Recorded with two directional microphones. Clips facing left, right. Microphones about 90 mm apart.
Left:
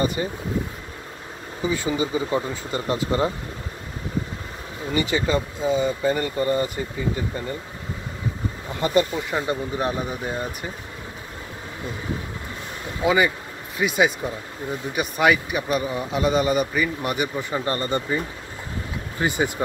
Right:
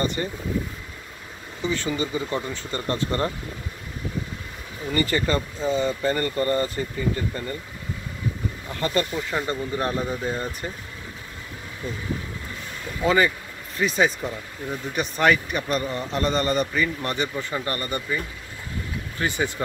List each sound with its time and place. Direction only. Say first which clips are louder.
0.0 s speech: left 2 dB; 10° left (ahead or behind)
1.6 s speech: left 2 dB; 10° left (ahead or behind)
4.8 s speech: even; 10° left (ahead or behind)
8.7 s speech: left 4 dB; 15° left (ahead or behind)
13.0 s speech: left 1 dB; 10° left (ahead or behind)